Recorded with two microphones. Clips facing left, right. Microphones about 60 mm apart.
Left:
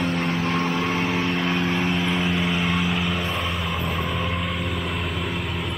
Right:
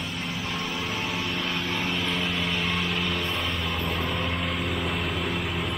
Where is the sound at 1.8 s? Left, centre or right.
Centre.